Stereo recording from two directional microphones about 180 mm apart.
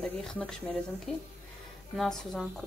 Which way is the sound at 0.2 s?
5° left (ahead or behind).